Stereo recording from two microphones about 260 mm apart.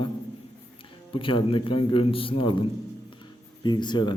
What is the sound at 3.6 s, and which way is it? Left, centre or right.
Speech, centre.